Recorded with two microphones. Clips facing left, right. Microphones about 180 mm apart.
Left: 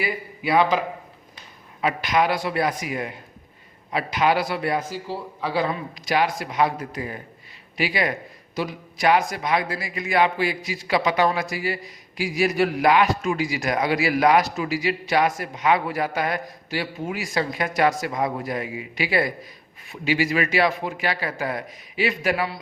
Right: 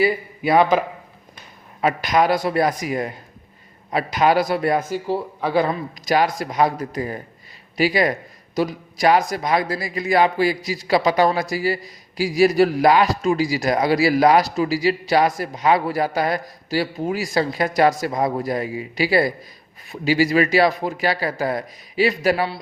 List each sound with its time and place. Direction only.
0.0 s a man's voice: 45° right (ahead or behind)
1.8 s a man's voice: 40° right (ahead or behind)